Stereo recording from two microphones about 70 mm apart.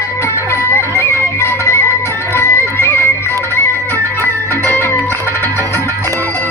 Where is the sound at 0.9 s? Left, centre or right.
Left.